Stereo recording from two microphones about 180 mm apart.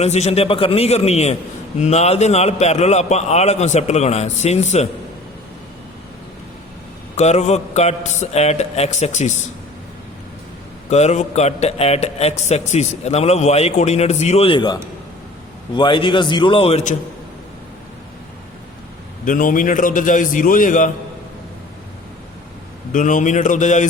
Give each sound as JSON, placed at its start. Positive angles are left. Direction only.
{"t": 0.0, "sound": "a man's voice", "side_deg": 35}
{"t": 7.2, "sound": "a man's voice", "side_deg": 35}
{"t": 10.8, "sound": "a man's voice", "side_deg": 40}
{"t": 19.2, "sound": "a man's voice", "side_deg": 50}
{"t": 22.9, "sound": "a man's voice", "side_deg": 45}